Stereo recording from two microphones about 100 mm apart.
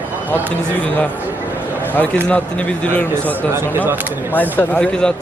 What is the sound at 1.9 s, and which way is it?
Speech, 15° left (ahead or behind).